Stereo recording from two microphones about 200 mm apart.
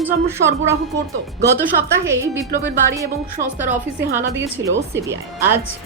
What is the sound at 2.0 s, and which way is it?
Speech, 15° right (ahead or behind).